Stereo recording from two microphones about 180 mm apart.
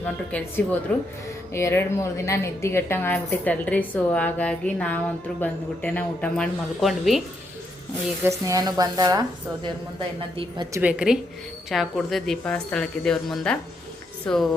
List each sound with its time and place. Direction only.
0.0 s a woman's voice: 10° left (ahead or behind)
8.2 s speech: 15° right (ahead or behind)
10.2 s a woman's voice: 30° right (ahead or behind)
10.8 s speech: 5° right (ahead or behind)